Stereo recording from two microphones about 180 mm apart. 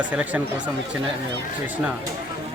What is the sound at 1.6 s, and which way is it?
Speech, 10° right (ahead or behind).